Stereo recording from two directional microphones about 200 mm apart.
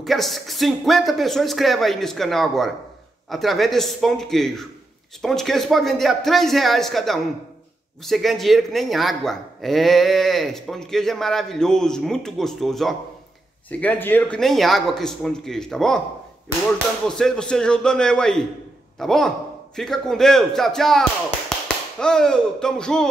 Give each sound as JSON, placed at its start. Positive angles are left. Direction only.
{"t": 0.0, "sound": "speech", "side_deg": 0}
{"t": 17.1, "sound": "speech", "side_deg": 5}